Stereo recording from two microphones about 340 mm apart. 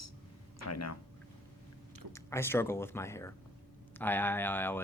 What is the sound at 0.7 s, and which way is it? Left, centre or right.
Speech, left.